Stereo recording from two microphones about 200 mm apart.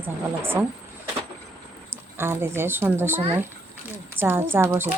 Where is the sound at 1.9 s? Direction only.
10° right (ahead or behind).